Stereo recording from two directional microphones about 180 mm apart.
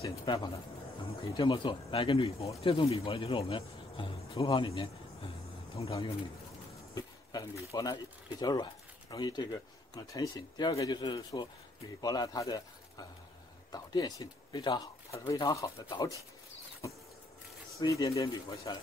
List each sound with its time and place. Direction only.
0.0 s speech: 20° left (ahead or behind)
7.0 s speech: 20° left (ahead or behind)
17.7 s speech: 20° left (ahead or behind)